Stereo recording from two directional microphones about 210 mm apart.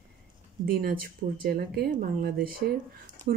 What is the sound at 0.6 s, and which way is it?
Speech, 45° right (ahead or behind).